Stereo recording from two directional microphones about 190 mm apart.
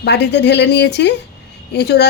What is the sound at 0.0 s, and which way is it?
Speech, 65° left (ahead or behind).